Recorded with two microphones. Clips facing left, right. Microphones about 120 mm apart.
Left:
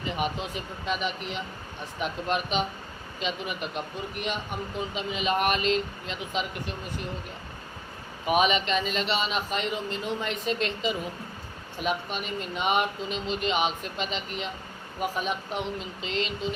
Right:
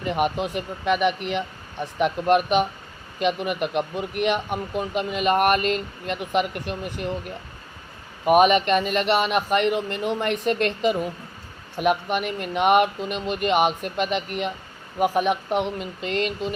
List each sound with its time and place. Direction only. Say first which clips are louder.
0.0 s speech: right 7 dB; 60° right (ahead or behind)
8.2 s speech: right 7 dB; 50° right (ahead or behind)